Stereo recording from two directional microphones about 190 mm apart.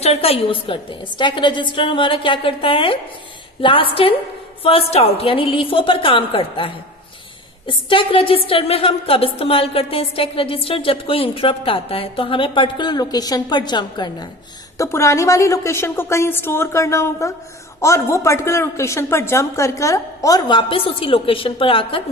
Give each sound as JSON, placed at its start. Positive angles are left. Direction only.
{"t": 0.0, "sound": "a woman's voice", "side_deg": 30}